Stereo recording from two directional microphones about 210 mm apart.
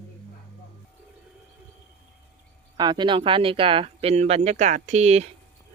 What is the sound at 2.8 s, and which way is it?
Speech, 20° right (ahead or behind).